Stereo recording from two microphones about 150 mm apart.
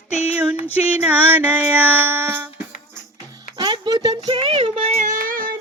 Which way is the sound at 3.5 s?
30° right (ahead or behind).